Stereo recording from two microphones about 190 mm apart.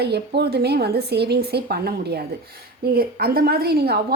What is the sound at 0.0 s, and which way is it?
A woman's voice, 60° right (ahead or behind).